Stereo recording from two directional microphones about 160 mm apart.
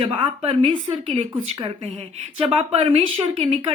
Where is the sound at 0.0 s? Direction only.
35° right (ahead or behind).